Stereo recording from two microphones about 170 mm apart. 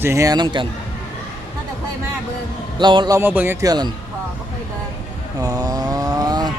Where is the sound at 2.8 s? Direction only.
25° right (ahead or behind).